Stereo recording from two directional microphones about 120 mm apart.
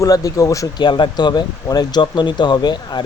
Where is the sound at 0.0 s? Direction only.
30° left (ahead or behind).